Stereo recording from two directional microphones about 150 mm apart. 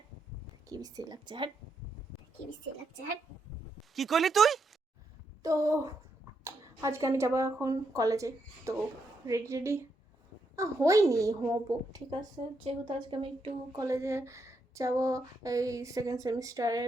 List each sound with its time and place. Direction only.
0.7 s speech: 25° right (ahead or behind)
3.9 s speech: centre (ahead or behind)
5.4 s a woman's voice: 20° right (ahead or behind)
12.4 s speech: 35° right (ahead or behind)
13.7 s speech: 20° right (ahead or behind)